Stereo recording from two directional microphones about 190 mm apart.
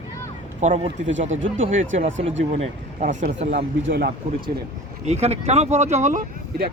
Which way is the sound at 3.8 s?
75° right (ahead or behind).